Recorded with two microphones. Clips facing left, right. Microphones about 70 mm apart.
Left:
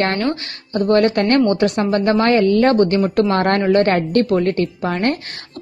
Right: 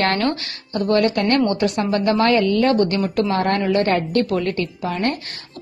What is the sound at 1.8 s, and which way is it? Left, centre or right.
Speech, left.